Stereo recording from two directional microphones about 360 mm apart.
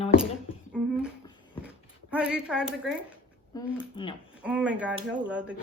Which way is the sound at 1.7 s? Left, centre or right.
Centre.